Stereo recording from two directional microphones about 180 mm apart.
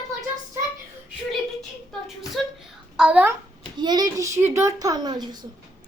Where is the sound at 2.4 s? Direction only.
Centre (ahead or behind).